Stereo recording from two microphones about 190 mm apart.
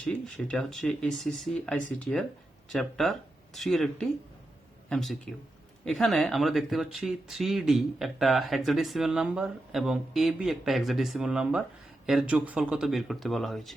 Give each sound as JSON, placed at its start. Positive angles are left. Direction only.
{"t": 0.0, "sound": "speech", "side_deg": 5}